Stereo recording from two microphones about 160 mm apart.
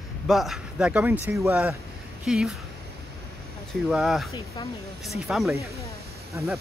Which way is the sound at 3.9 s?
Centre (ahead or behind).